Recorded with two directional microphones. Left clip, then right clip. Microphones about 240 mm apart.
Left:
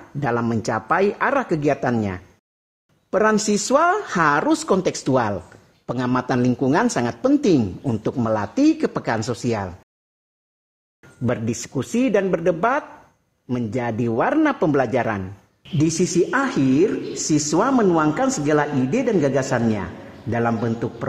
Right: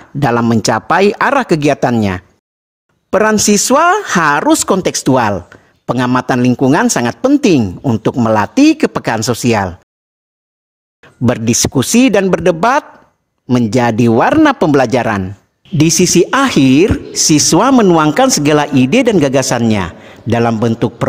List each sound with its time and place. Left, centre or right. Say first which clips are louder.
0.2 s speech: right 10 dB; right
11.2 s speech: right 11 dB; right